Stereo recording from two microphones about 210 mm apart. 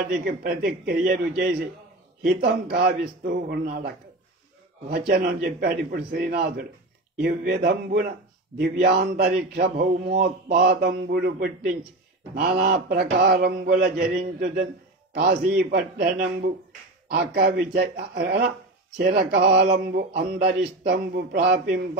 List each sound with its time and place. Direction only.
0.2 s speech: 45° right (ahead or behind)